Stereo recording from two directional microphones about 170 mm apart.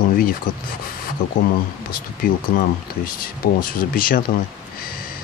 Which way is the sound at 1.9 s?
60° left (ahead or behind).